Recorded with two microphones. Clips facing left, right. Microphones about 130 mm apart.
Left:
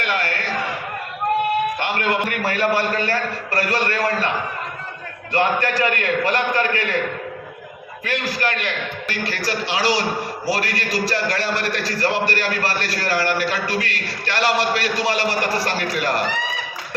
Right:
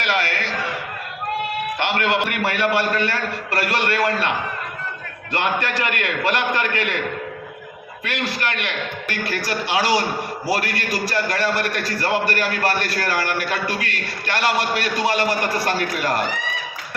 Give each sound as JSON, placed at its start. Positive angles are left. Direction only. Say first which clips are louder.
{"t": 0.0, "sound": "a sound", "louder": "right 1 dB", "side_deg": -80}
{"t": 1.8, "sound": "a man's voice", "louder": "right 1 dB", "side_deg": -80}
{"t": 5.3, "sound": "a man's voice", "louder": "left 3 dB", "side_deg": -65}
{"t": 8.0, "sound": "a man's voice", "louder": "left 2 dB", "side_deg": -65}